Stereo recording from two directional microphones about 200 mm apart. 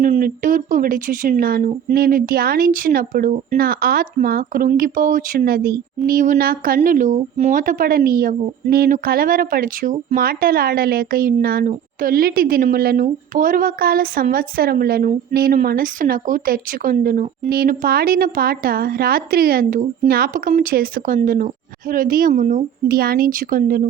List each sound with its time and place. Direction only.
0.0 s a woman's voice: 45° right (ahead or behind)